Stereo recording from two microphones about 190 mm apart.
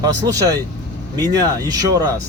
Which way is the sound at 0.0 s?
20° right (ahead or behind).